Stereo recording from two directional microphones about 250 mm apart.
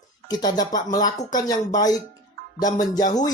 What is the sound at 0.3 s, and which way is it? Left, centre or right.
Speech, centre.